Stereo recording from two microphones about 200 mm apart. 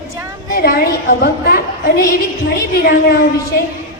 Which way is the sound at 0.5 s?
50° left (ahead or behind).